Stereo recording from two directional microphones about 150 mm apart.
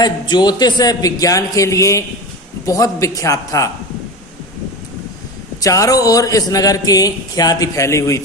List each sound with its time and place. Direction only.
0.0 s a man's voice: 30° left (ahead or behind)
5.6 s a man's voice: 25° left (ahead or behind)